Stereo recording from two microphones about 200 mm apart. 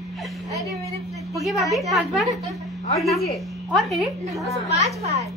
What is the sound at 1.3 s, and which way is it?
A woman's voice, centre (ahead or behind).